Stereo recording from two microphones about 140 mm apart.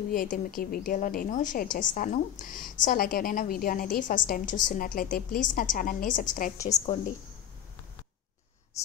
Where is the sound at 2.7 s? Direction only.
85° left; by 6.9 s 55° left (ahead or behind).